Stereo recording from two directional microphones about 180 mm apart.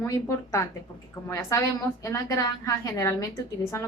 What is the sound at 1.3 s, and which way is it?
A woman's voice, 15° left (ahead or behind).